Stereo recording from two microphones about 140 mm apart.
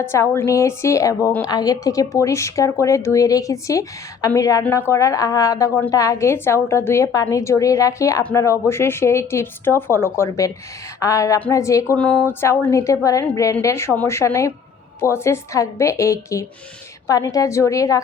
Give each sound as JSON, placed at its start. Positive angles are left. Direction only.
{"t": 0.0, "sound": "a woman's voice", "side_deg": 20}